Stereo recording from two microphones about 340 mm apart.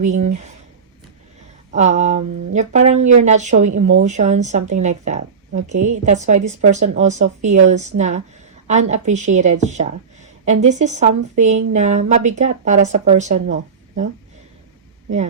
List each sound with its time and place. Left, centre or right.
0.0 s a woman's voice: right
1.7 s a woman's voice: centre